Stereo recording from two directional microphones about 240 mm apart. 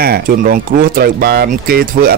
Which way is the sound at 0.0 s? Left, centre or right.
Right.